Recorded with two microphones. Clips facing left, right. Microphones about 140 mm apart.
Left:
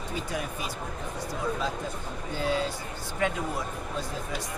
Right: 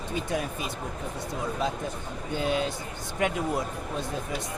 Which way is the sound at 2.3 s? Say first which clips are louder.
Right 1 dB; 20° right (ahead or behind).